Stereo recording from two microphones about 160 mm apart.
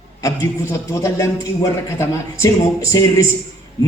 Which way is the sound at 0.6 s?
15° left (ahead or behind).